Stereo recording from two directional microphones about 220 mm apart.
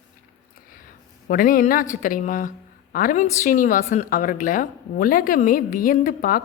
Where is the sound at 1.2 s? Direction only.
40° left (ahead or behind).